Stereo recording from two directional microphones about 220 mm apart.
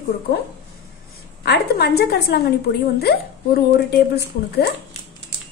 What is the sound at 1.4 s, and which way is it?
A woman's voice, 45° left (ahead or behind).